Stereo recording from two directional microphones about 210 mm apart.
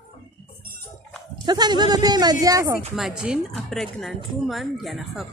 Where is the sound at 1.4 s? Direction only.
20° right (ahead or behind).